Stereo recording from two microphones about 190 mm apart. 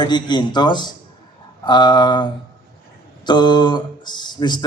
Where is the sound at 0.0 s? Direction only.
25° left (ahead or behind).